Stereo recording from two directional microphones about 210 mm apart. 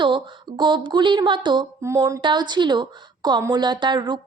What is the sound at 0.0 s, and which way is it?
Speech, 20° right (ahead or behind).